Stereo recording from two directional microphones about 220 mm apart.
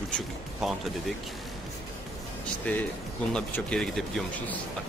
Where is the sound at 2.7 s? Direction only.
5° left (ahead or behind).